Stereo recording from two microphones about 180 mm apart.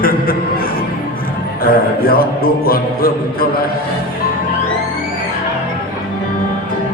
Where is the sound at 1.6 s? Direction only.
55° left (ahead or behind).